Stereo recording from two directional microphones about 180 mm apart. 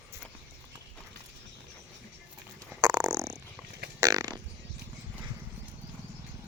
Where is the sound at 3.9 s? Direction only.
20° right (ahead or behind).